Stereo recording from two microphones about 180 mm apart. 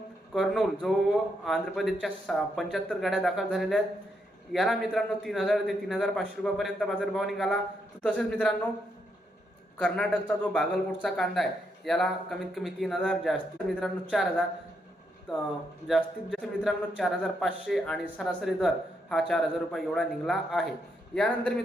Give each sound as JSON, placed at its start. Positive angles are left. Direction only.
{"t": 0.3, "sound": "a man's voice", "side_deg": 0}
{"t": 9.7, "sound": "a man's voice", "side_deg": 5}
{"t": 15.9, "sound": "a man's voice", "side_deg": 0}